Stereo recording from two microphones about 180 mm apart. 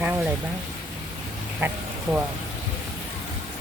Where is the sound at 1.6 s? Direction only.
10° right (ahead or behind).